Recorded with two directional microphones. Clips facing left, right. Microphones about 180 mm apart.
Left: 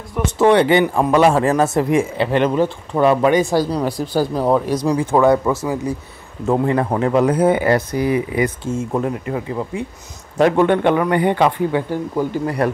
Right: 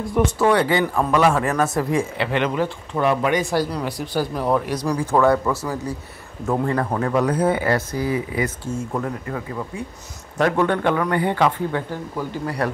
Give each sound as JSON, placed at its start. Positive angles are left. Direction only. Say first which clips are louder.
{"t": 0.4, "sound": "speech", "louder": "left 8 dB", "side_deg": 25}
{"t": 2.3, "sound": "speech", "louder": "left 5 dB", "side_deg": 40}